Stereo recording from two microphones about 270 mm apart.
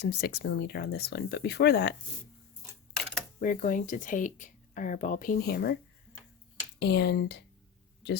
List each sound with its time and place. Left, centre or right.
0.0 s speech: left
3.4 s speech: left
6.7 s speech: left